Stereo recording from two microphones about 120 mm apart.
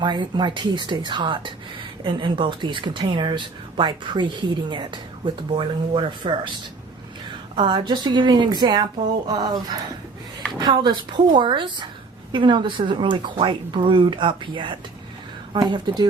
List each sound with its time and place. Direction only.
0.0 s speech: 40° right (ahead or behind)
7.5 s speech: 40° right (ahead or behind)